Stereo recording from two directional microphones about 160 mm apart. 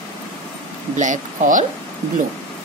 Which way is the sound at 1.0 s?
50° right (ahead or behind).